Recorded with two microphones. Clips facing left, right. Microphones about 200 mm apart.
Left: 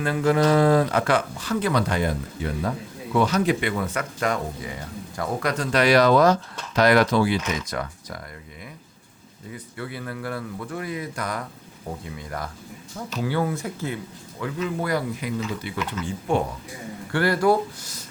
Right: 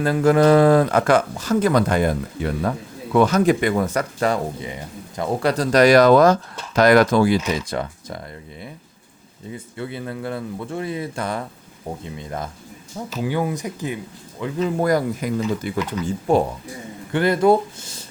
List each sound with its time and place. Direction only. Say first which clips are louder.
0.0 s speech: right 5 dB; 45° right (ahead or behind)
4.7 s speech: right 1 dB; 20° right (ahead or behind)
9.5 s speech: right 4 dB; 25° right (ahead or behind)
14.6 s speech: right 7 dB; 45° right (ahead or behind)
17.1 s speech: right 4 dB; 20° right (ahead or behind)